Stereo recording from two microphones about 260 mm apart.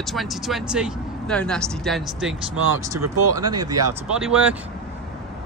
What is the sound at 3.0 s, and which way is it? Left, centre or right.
Speech, right.